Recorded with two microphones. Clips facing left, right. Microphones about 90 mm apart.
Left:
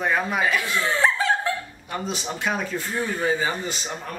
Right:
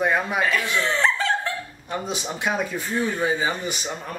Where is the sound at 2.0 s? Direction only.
15° right (ahead or behind).